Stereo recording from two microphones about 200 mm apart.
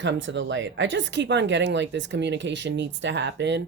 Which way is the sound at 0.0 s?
65° right (ahead or behind).